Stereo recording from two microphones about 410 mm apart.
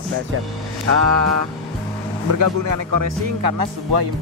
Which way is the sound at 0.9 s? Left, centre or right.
Right.